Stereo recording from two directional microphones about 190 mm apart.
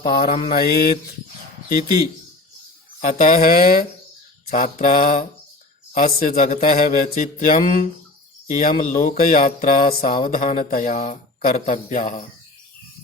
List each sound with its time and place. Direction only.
0.0 s speech: 50° left (ahead or behind)
3.0 s speech: 40° left (ahead or behind)